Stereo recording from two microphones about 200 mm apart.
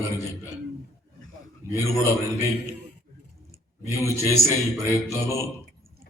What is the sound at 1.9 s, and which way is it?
Speech, 15° left (ahead or behind).